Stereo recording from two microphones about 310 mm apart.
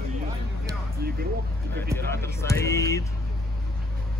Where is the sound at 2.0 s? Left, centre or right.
Centre.